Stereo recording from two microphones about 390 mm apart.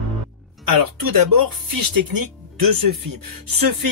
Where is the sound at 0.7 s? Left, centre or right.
Right.